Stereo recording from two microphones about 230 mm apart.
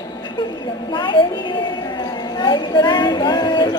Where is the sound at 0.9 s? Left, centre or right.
Left.